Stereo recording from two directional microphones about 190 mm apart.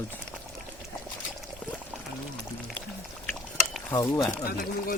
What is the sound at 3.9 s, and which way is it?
Speech, 15° left (ahead or behind).